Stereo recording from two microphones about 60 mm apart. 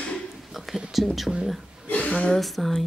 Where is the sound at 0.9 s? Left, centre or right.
Centre.